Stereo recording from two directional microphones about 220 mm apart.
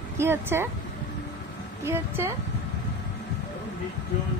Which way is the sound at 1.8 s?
10° right (ahead or behind).